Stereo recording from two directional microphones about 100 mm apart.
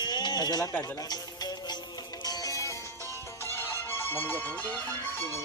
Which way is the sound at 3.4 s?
25° left (ahead or behind).